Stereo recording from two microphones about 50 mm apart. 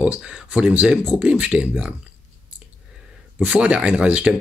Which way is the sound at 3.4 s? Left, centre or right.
Right.